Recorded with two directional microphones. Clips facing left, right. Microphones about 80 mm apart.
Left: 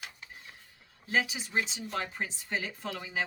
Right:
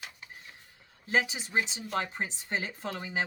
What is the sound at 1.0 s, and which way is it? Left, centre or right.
A woman's voice, right.